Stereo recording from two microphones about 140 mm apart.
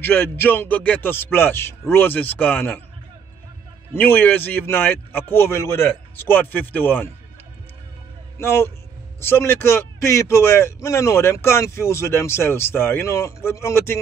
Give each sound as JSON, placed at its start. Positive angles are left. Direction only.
{"t": 0.0, "sound": "a man's voice", "side_deg": 15}
{"t": 3.9, "sound": "a man's voice", "side_deg": 15}
{"t": 8.4, "sound": "a man's voice", "side_deg": 20}